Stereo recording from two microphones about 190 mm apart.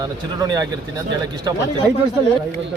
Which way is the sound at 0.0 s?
20° right (ahead or behind).